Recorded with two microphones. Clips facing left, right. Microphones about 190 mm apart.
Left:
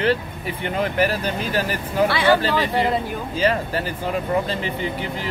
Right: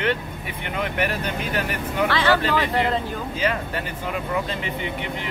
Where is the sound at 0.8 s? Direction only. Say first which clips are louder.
Left 4 dB; 35° left (ahead or behind).